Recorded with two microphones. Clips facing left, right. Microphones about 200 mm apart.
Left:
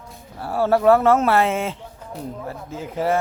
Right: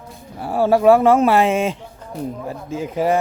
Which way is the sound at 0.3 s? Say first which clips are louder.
Right 3 dB; 15° right (ahead or behind).